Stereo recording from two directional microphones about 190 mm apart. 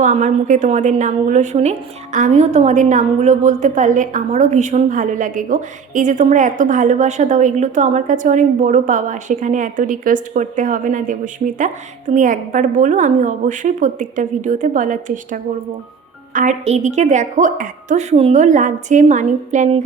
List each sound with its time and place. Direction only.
0.0 s a woman's voice: 40° right (ahead or behind)